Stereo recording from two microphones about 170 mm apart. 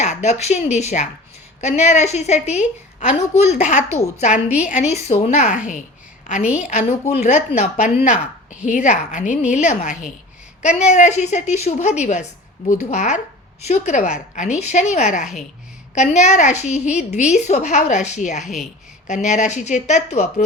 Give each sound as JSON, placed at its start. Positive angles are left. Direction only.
{"t": 0.0, "sound": "a woman's voice", "side_deg": 45}
{"t": 4.4, "sound": "a woman's voice", "side_deg": -10}
{"t": 4.7, "sound": "a woman's voice", "side_deg": 40}
{"t": 6.4, "sound": "a woman's voice", "side_deg": -5}
{"t": 6.7, "sound": "a woman's voice", "side_deg": 40}
{"t": 18.4, "sound": "a woman's voice", "side_deg": 0}
{"t": 19.0, "sound": "a woman's voice", "side_deg": 45}